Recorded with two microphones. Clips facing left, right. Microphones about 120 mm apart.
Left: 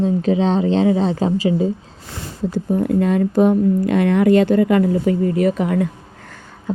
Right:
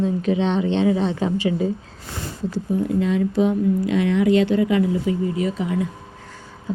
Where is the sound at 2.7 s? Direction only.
55° left (ahead or behind).